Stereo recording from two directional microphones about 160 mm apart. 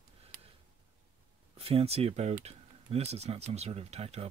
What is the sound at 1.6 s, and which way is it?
Speech, 40° right (ahead or behind).